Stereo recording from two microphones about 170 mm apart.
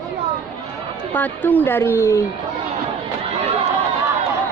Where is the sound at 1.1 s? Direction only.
10° left (ahead or behind).